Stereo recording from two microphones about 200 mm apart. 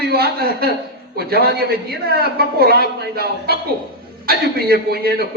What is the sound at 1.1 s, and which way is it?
A man's voice, 50° right (ahead or behind).